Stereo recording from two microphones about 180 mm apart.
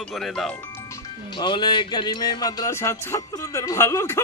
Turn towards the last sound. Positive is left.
turn(degrees=15)  # may be behind; listen again after turning